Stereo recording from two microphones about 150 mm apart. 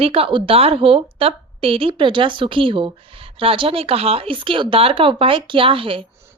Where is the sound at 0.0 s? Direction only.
40° right (ahead or behind).